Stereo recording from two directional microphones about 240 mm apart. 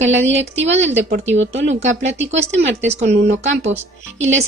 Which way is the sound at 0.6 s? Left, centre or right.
Right.